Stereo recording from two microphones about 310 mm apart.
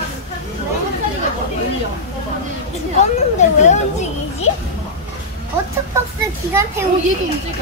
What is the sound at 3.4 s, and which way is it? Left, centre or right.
Speech, left.